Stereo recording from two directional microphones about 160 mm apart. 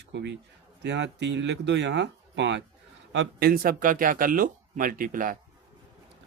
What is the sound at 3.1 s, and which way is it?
Speech, 70° right (ahead or behind).